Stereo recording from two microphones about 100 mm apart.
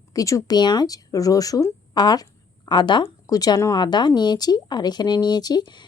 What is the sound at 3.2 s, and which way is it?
Speech, 40° left (ahead or behind).